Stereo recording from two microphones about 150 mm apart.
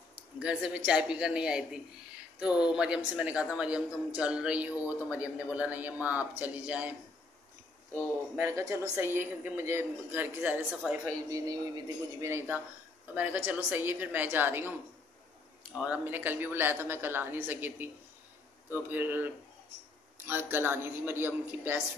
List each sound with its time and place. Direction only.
0.4 s a man's voice: 10° right (ahead or behind)
8.4 s a man's voice: 20° right (ahead or behind); by 11.0 s centre (ahead or behind)
11.2 s a man's voice: 25° right (ahead or behind)